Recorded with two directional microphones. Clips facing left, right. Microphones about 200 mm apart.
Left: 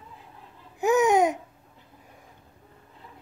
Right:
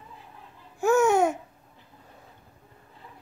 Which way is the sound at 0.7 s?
15° left (ahead or behind).